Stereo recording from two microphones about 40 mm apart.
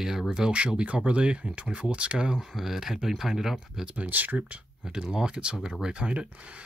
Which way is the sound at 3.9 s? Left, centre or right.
Right.